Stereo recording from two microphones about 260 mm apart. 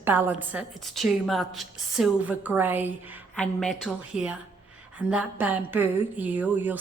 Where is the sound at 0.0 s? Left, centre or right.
Centre.